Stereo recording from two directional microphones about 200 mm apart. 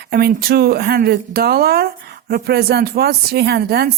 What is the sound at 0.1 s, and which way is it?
A woman's voice, 50° right (ahead or behind).